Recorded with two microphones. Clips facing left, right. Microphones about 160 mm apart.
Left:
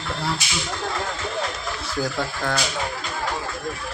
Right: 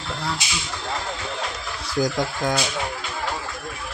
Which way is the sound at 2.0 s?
15° right (ahead or behind).